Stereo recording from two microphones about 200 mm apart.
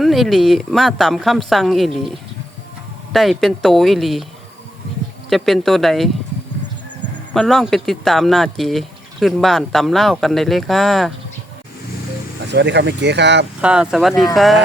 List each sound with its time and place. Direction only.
0.0 s a woman's voice: centre (ahead or behind)
5.3 s a woman's voice: centre (ahead or behind)
7.3 s a woman's voice: centre (ahead or behind)
12.5 s speech: 60° right (ahead or behind)
13.6 s a woman's voice: 5° right (ahead or behind)